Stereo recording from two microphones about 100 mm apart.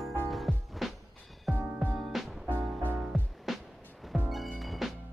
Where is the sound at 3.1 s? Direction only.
Centre (ahead or behind).